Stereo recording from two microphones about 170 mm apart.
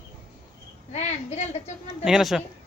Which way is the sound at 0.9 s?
40° left (ahead or behind).